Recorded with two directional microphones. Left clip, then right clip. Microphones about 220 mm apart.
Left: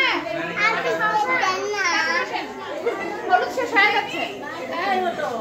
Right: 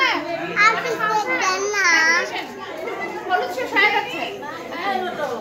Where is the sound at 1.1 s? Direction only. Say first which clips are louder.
Even; 45° right (ahead or behind).